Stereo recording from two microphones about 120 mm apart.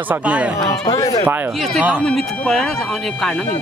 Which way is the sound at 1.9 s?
5° left (ahead or behind).